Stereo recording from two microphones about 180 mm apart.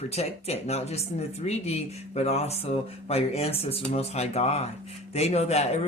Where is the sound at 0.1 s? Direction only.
35° left (ahead or behind).